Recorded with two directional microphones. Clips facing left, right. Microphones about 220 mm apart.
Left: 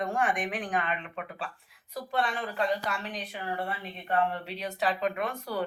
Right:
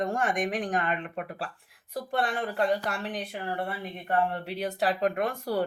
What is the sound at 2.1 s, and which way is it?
Speech, 60° right (ahead or behind).